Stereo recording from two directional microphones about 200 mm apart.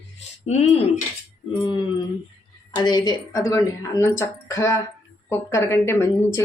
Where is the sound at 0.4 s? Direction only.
35° left (ahead or behind).